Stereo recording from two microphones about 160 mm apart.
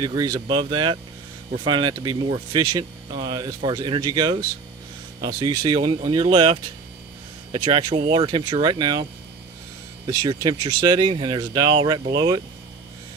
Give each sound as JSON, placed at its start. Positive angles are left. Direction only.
{"t": 0.0, "sound": "speech", "side_deg": -25}
{"t": 10.1, "sound": "speech", "side_deg": -25}